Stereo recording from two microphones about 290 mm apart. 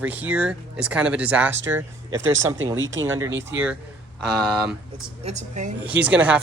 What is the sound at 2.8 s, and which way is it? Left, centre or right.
Speech, right.